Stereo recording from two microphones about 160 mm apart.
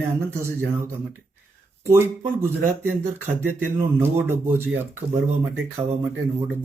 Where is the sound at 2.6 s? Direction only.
15° right (ahead or behind).